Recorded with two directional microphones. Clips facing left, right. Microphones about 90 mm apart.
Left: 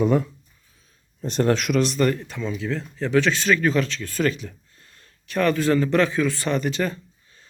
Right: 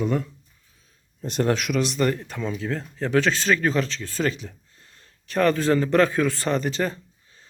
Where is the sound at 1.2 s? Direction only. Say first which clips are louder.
Left 2 dB; 10° right (ahead or behind).